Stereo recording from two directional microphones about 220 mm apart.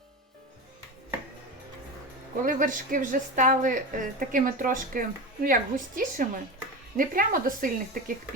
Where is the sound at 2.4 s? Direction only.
35° right (ahead or behind).